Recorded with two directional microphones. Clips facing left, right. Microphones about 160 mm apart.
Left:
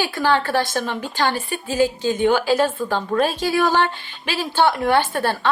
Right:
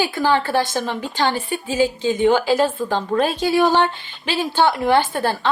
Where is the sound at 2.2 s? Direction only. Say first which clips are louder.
Right 1 dB; 15° right (ahead or behind).